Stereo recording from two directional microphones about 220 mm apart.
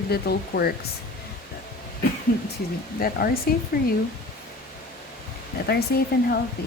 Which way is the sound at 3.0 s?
40° left (ahead or behind).